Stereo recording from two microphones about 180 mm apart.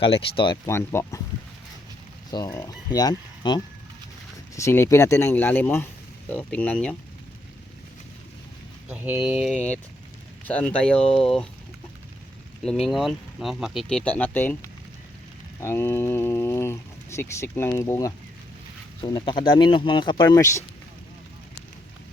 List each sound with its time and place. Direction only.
0.0 s speech: 30° left (ahead or behind); by 1.2 s 15° left (ahead or behind)
2.3 s speech: 20° left (ahead or behind)
8.9 s speech: 10° right (ahead or behind)
9.6 s speech: 10° left (ahead or behind)
12.6 s speech: centre (ahead or behind)